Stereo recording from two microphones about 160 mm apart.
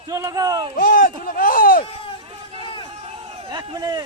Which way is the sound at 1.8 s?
35° left (ahead or behind).